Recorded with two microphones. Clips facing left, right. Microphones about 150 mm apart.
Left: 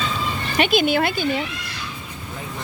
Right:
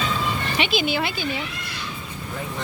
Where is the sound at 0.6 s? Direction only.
50° left (ahead or behind).